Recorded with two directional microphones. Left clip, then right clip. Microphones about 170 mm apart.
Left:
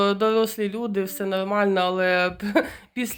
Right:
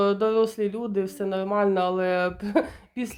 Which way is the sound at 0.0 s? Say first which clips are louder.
Left 1 dB; 5° left (ahead or behind).